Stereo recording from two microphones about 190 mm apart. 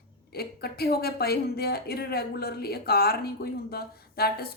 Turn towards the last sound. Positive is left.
turn(degrees=55)  # may be behind; listen again after turning